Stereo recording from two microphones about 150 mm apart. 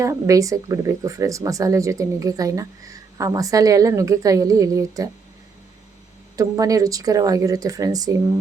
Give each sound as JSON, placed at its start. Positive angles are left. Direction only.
{"t": 0.0, "sound": "speech", "side_deg": -20}
{"t": 6.3, "sound": "speech", "side_deg": -25}